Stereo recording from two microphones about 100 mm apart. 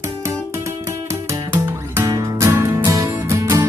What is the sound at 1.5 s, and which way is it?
Music, 25° right (ahead or behind).